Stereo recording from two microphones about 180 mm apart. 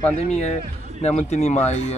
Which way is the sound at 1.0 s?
40° left (ahead or behind).